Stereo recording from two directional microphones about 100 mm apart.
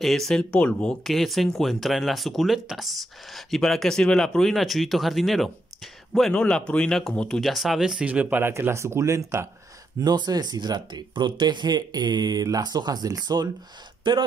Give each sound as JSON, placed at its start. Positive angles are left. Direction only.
{"t": 0.0, "sound": "speech", "side_deg": 5}
{"t": 1.0, "sound": "speech", "side_deg": 0}
{"t": 9.9, "sound": "speech", "side_deg": -45}
{"t": 14.0, "sound": "speech", "side_deg": -55}